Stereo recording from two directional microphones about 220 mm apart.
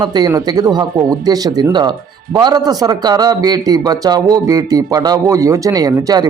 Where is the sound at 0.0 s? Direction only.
20° right (ahead or behind).